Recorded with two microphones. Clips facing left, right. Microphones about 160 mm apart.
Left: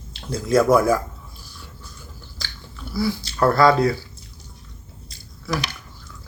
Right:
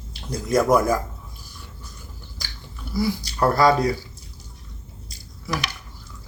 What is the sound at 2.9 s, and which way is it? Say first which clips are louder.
Speech: even; 15° right (ahead or behind).